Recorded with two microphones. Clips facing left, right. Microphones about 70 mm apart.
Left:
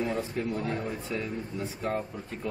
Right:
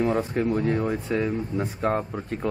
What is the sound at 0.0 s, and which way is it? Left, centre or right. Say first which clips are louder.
Speech: right 7 dB; right.